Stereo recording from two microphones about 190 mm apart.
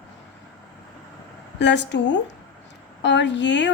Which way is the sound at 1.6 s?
70° left (ahead or behind).